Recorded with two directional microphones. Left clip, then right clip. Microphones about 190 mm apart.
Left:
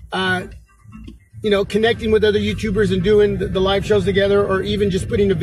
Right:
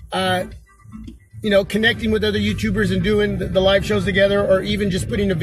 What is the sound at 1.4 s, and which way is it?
A man's voice, 35° right (ahead or behind).